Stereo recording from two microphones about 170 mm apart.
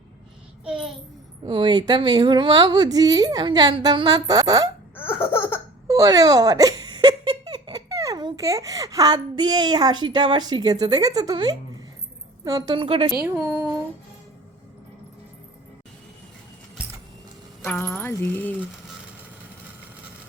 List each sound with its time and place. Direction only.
0.6 s child singing: 5° right (ahead or behind)
1.5 s a woman's voice: 30° right (ahead or behind)
4.9 s laughter: 15° left (ahead or behind)
5.9 s a woman's voice: 20° right (ahead or behind)
13.2 s speech: 10° right (ahead or behind)
17.6 s speech: 10° left (ahead or behind)